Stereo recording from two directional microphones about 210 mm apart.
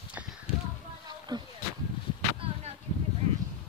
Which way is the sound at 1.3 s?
20° right (ahead or behind).